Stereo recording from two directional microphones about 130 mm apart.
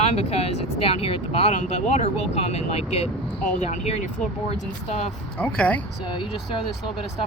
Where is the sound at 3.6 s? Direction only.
65° left (ahead or behind).